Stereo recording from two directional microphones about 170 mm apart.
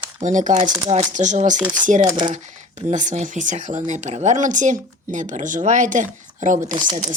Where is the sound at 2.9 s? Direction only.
45° right (ahead or behind).